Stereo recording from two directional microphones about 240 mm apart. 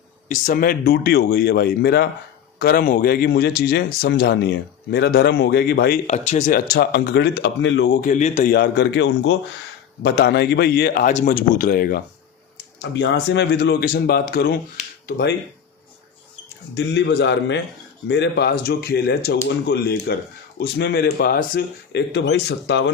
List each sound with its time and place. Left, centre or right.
0.3 s a man's voice: left
6.1 s a man's voice: left
8.0 s a man's voice: left
8.5 s a man's voice: left
12.8 s speech: left
16.7 s speech: left